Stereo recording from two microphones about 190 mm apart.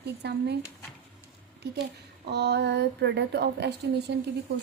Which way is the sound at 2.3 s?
60° right (ahead or behind).